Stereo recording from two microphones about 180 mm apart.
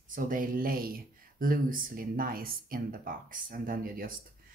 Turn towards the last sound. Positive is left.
turn(degrees=-50)  # may be behind; listen again after turning